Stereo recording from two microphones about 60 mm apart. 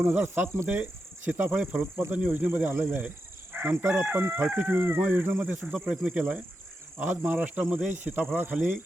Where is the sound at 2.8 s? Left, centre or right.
Right.